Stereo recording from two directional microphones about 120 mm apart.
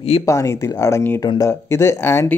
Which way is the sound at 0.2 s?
25° left (ahead or behind).